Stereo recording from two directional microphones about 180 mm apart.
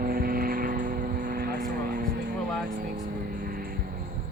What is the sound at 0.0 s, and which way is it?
Vehicle, 55° right (ahead or behind).